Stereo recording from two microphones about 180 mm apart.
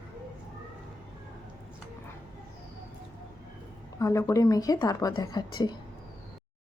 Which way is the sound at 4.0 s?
15° left (ahead or behind).